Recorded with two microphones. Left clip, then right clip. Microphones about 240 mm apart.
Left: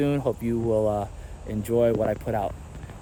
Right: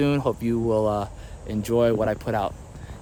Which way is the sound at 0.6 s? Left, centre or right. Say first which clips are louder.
Right 1 dB; right.